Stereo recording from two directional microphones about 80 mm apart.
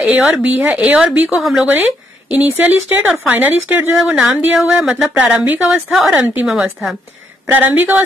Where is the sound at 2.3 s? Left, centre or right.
Right.